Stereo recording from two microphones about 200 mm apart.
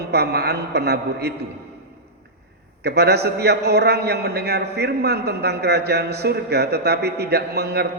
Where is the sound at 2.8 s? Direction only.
55° right (ahead or behind).